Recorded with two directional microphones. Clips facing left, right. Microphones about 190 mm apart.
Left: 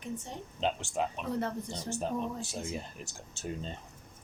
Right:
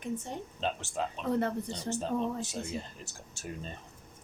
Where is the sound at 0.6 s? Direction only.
15° left (ahead or behind).